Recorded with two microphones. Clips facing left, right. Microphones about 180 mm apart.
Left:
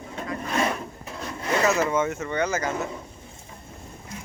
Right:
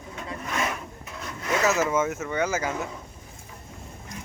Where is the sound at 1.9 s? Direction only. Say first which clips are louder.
Left 1 dB; 5° right (ahead or behind).